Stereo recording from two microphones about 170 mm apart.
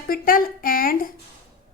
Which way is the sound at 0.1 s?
60° left (ahead or behind).